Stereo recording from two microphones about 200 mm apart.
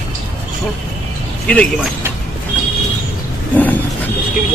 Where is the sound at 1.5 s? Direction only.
5° left (ahead or behind).